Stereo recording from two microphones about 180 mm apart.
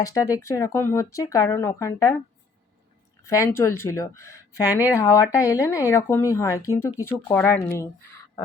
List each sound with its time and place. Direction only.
0.0 s speech: 20° left (ahead or behind)
3.2 s speech: 15° left (ahead or behind)